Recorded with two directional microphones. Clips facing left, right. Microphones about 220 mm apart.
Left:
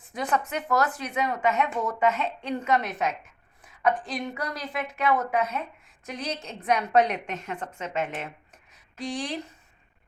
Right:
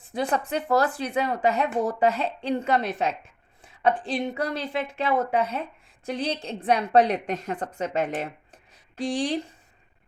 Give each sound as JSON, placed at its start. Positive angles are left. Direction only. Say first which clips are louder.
{"t": 0.0, "sound": "speech", "louder": "right 2 dB", "side_deg": -30}